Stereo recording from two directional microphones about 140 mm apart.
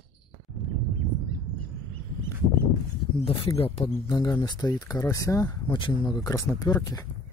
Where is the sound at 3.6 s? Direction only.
45° left (ahead or behind).